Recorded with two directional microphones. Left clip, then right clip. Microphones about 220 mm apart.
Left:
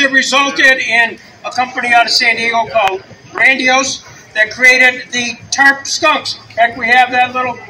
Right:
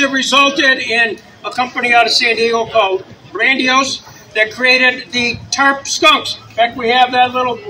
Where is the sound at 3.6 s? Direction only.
40° left (ahead or behind).